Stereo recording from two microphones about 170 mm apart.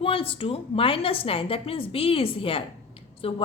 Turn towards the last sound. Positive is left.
turn(degrees=35)  # may be behind; listen again after turning